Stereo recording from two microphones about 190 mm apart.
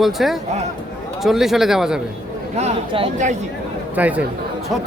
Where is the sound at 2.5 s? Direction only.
30° right (ahead or behind).